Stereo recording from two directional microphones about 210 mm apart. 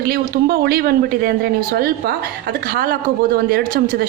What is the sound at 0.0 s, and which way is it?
A woman's voice, 45° right (ahead or behind).